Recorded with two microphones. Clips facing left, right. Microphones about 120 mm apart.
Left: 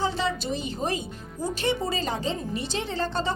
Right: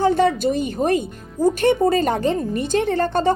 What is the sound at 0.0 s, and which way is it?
Speech, 55° right (ahead or behind).